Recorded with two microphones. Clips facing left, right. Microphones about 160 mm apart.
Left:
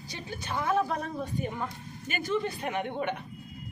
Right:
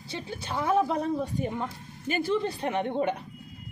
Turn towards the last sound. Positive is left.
turn(degrees=-30)  # may be behind; listen again after turning